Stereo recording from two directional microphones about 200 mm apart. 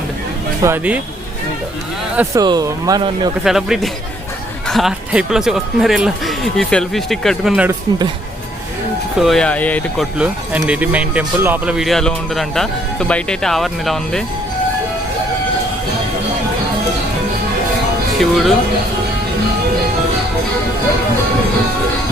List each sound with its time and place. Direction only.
0.6 s speech: 10° right (ahead or behind)
2.1 s speech: 20° right (ahead or behind)
3.4 s speech: centre (ahead or behind)
9.1 s speech: centre (ahead or behind)
10.2 s speech: 5° right (ahead or behind)
18.2 s speech: centre (ahead or behind)